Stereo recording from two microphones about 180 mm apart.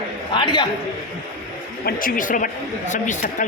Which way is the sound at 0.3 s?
25° left (ahead or behind).